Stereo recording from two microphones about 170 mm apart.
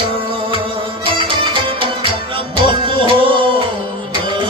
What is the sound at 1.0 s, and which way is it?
Music, 30° right (ahead or behind).